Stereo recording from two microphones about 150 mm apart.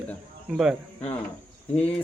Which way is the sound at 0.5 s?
5° right (ahead or behind).